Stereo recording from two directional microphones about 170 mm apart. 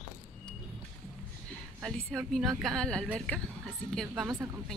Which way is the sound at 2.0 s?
Centre (ahead or behind).